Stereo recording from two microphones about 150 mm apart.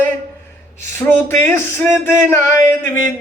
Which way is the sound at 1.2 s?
15° left (ahead or behind).